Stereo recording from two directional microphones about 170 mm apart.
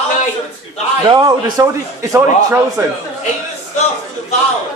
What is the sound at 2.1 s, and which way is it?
Speech, 15° right (ahead or behind).